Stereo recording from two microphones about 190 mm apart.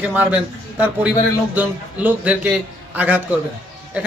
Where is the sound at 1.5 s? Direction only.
10° right (ahead or behind).